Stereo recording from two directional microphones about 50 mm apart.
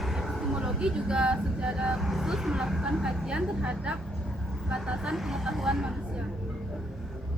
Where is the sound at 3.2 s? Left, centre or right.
Centre.